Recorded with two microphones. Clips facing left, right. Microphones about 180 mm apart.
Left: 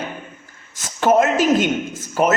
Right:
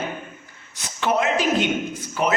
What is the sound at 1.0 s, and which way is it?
Speech, 45° left (ahead or behind).